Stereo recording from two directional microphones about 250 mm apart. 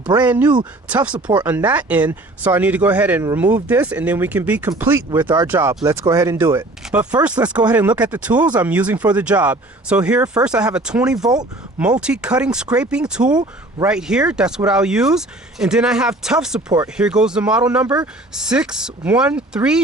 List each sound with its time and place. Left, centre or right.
0.1 s speech: centre
11.2 s speech: centre
11.8 s speech: centre
13.3 s speech: centre
13.8 s speech: centre